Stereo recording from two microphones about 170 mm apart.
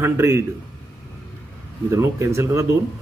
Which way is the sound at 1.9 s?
15° right (ahead or behind).